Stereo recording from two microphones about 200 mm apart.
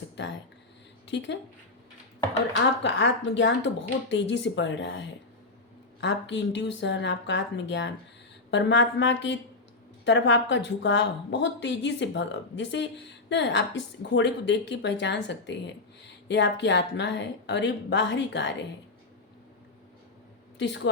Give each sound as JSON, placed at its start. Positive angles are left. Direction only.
{"t": 0.2, "sound": "a woman's voice", "side_deg": 65}
{"t": 2.8, "sound": "a woman's voice", "side_deg": 65}
{"t": 20.6, "sound": "a woman's voice", "side_deg": 65}